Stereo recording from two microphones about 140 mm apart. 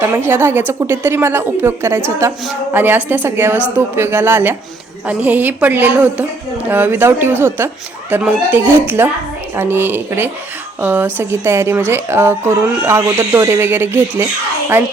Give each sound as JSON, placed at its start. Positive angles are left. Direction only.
{"t": 0.0, "sound": "a woman's voice", "side_deg": -15}